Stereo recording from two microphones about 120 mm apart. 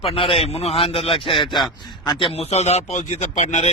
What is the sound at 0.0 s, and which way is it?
A man's voice, 50° left (ahead or behind).